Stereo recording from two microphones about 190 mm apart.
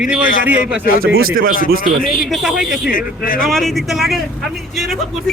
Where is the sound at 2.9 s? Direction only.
50° left (ahead or behind).